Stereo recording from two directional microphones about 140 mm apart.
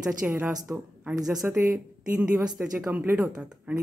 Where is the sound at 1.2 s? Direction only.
5° right (ahead or behind).